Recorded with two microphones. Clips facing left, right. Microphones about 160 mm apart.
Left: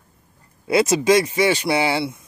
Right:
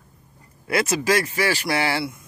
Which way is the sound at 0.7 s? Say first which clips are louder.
Left 5 dB; 20° left (ahead or behind).